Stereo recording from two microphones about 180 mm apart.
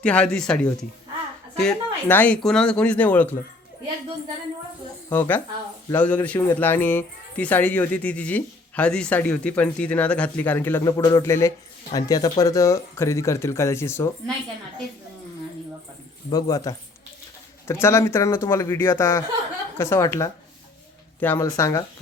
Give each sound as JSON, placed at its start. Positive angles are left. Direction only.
{"t": 0.0, "sound": "a man's voice", "side_deg": 5}
{"t": 5.0, "sound": "a man's voice", "side_deg": 10}
{"t": 16.3, "sound": "a man's voice", "side_deg": 20}